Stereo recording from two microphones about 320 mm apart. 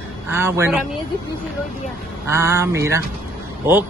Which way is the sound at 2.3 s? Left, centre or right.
Centre.